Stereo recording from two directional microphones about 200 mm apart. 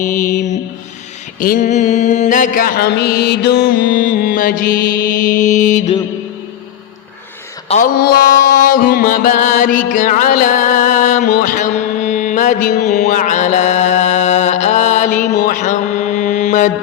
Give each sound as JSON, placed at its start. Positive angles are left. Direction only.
{"t": 0.0, "sound": "mantra", "side_deg": 40}
{"t": 7.9, "sound": "mantra", "side_deg": 50}
{"t": 8.6, "sound": "music", "side_deg": 45}